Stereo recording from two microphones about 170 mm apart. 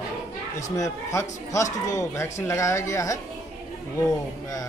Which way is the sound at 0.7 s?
20° left (ahead or behind).